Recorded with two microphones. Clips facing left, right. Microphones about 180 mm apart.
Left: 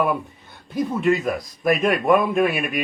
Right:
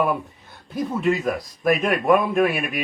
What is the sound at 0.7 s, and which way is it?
A man's voice, centre (ahead or behind).